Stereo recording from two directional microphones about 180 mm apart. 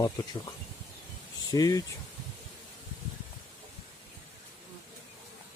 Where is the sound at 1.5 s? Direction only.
20° left (ahead or behind).